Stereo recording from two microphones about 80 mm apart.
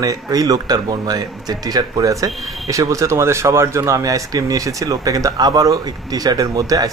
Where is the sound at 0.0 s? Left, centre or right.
Right.